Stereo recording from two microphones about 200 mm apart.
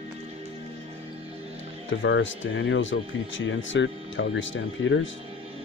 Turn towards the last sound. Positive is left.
turn(degrees=70)  # may be behind; listen again after turning